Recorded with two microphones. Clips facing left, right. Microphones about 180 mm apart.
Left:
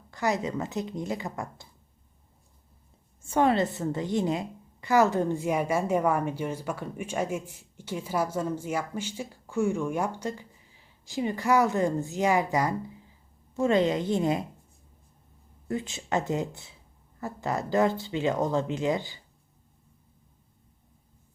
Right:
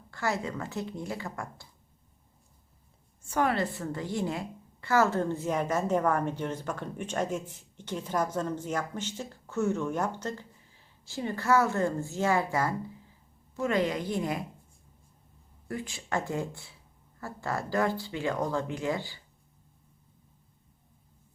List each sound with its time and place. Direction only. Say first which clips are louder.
0.1 s speech: left 4 dB; 20° left (ahead or behind)
3.2 s a woman's voice: left 4 dB; 25° left (ahead or behind)
15.6 s speech: left 5 dB; 25° left (ahead or behind)